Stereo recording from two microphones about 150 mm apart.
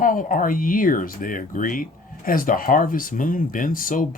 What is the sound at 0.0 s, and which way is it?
Speech, 65° left (ahead or behind).